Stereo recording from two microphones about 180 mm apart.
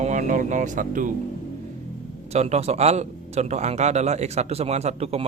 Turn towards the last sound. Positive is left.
turn(degrees=-35)  # may be behind; listen again after turning